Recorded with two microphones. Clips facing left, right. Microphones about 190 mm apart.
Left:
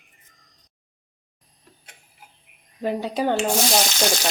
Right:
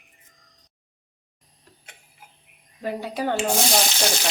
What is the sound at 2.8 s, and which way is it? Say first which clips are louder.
Speech: left 4 dB; 20° left (ahead or behind).